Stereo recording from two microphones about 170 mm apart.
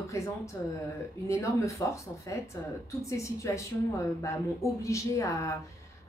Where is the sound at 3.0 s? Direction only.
20° left (ahead or behind).